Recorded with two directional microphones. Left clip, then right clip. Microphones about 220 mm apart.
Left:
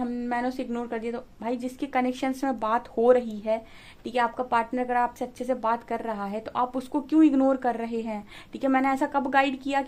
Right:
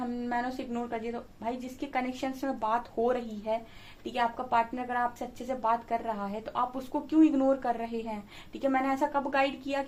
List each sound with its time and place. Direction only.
0.0 s a woman's voice: 50° left (ahead or behind)